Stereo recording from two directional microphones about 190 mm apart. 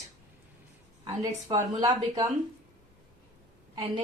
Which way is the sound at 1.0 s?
20° right (ahead or behind).